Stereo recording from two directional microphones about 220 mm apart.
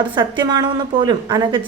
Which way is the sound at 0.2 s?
20° right (ahead or behind).